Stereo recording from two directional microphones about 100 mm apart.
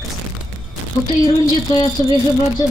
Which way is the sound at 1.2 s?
40° left (ahead or behind).